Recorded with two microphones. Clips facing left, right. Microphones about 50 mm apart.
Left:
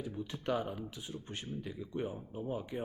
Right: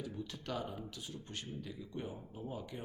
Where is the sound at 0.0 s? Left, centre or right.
Left.